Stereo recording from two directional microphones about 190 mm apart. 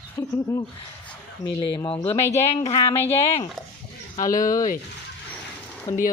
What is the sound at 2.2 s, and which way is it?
Speech, 15° left (ahead or behind).